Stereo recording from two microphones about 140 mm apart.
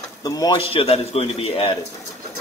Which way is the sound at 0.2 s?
25° left (ahead or behind).